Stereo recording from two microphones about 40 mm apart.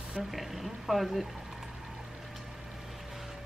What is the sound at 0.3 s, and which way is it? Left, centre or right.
Speech, centre.